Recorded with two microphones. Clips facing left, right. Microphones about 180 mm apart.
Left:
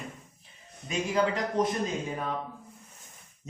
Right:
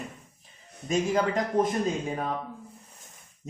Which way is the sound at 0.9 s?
45° right (ahead or behind).